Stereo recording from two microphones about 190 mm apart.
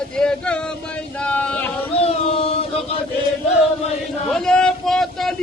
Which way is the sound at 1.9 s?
30° left (ahead or behind).